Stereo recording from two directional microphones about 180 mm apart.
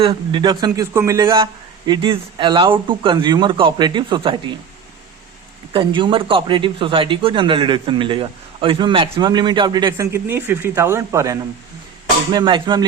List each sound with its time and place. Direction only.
0.0 s speech: 30° right (ahead or behind)
5.7 s speech: 25° right (ahead or behind)